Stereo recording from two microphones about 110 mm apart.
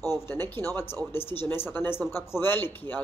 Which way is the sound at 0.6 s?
25° left (ahead or behind).